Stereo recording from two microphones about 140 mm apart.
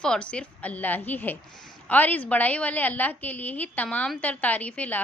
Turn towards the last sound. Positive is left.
turn(degrees=10)  # may be behind; listen again after turning